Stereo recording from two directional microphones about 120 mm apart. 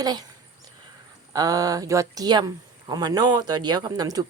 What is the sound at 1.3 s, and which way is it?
Speech, 30° right (ahead or behind).